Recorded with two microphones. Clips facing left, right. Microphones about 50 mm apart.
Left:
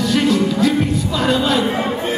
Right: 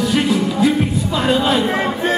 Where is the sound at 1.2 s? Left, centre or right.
Centre.